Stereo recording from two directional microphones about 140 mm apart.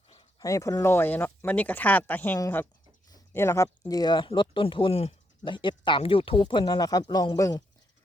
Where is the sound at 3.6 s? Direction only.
30° left (ahead or behind).